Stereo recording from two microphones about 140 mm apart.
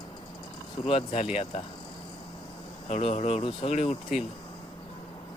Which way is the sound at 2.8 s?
50° left (ahead or behind).